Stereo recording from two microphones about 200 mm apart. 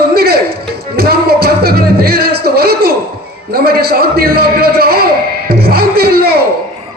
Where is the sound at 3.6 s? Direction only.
50° right (ahead or behind).